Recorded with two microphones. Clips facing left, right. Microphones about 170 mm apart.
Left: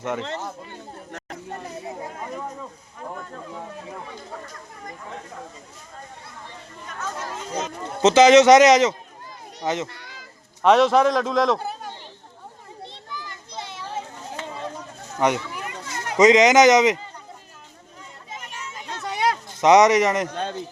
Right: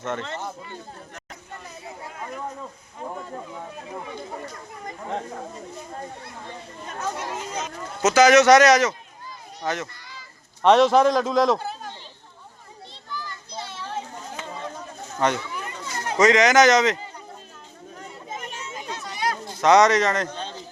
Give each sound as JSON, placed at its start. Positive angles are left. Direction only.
{"t": 0.0, "sound": "speech", "side_deg": 10}
{"t": 5.1, "sound": "speech", "side_deg": -50}
{"t": 6.8, "sound": "speech", "side_deg": -25}
{"t": 7.2, "sound": "speech", "side_deg": -10}
{"t": 8.0, "sound": "a man's voice", "side_deg": 25}
{"t": 9.9, "sound": "a sound", "side_deg": 60}
{"t": 10.6, "sound": "a man's voice", "side_deg": 0}
{"t": 12.9, "sound": "children playing", "side_deg": 20}
{"t": 15.2, "sound": "speech", "side_deg": 15}
{"t": 18.6, "sound": "children playing", "side_deg": -20}
{"t": 19.0, "sound": "a sound", "side_deg": 65}
{"t": 19.5, "sound": "speech", "side_deg": 15}
{"t": 20.3, "sound": "a sound", "side_deg": 55}